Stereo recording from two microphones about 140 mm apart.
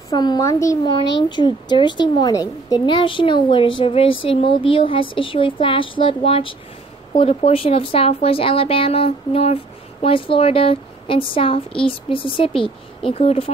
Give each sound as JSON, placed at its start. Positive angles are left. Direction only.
{"t": 0.1, "sound": "a child's voice", "side_deg": 30}
{"t": 0.8, "sound": "a woman's voice", "side_deg": 35}